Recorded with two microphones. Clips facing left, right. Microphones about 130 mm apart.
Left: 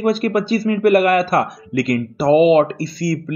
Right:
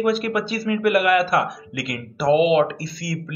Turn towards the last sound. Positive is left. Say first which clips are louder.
# left 7 dB
turn(degrees=40)  # may be behind; listen again after turning